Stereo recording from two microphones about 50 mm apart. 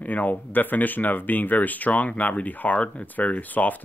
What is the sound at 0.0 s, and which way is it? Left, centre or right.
Speech, left.